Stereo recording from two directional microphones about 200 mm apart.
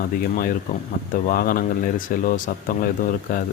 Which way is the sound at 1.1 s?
45° left (ahead or behind).